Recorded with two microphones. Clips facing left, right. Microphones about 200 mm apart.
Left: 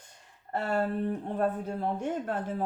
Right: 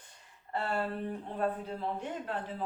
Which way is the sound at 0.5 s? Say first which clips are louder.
Left 5 dB; 45° left (ahead or behind).